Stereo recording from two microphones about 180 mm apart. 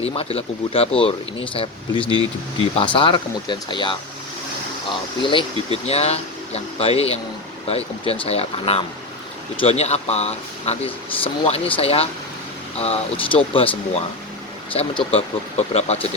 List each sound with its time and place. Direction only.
0.0 s speech: 35° left (ahead or behind)
14.7 s speech: 30° left (ahead or behind)